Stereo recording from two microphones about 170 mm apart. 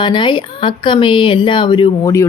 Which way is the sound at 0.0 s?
30° left (ahead or behind).